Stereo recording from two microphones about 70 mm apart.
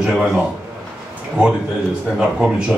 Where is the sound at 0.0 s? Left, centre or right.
Centre.